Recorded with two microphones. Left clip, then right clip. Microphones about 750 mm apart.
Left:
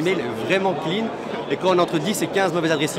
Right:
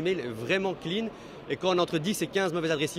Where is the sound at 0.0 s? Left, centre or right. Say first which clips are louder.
Left 8 dB; right.